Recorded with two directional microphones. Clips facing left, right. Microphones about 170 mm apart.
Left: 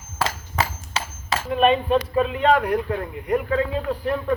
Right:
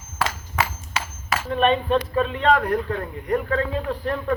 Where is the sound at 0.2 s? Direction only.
35° left (ahead or behind).